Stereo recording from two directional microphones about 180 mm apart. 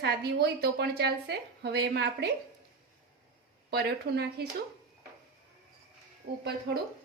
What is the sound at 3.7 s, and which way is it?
Speech, 65° right (ahead or behind).